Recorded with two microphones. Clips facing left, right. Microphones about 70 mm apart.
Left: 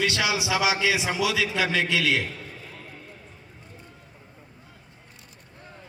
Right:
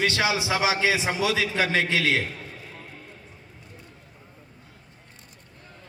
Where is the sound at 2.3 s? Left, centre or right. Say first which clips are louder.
Even; centre.